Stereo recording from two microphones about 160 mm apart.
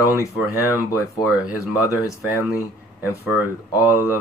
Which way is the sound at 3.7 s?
20° left (ahead or behind).